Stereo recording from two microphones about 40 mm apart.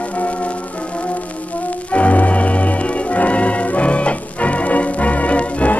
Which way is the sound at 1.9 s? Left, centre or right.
Left.